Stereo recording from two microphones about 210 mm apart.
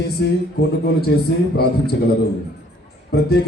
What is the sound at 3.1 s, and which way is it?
Speech, 50° left (ahead or behind).